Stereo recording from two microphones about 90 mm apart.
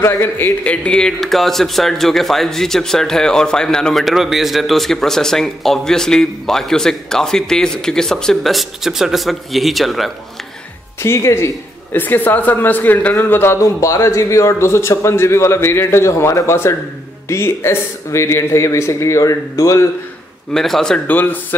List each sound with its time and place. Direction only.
0.0 s a man's voice: 30° left (ahead or behind)
0.7 s speech: 10° left (ahead or behind)
11.0 s a man's voice: 30° left (ahead or behind)
20.5 s speech: 5° left (ahead or behind)
21.1 s a man's voice: 20° left (ahead or behind)